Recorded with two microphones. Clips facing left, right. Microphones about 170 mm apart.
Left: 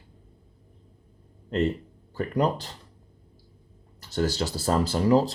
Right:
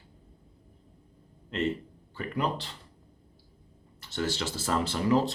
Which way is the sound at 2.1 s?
40° left (ahead or behind).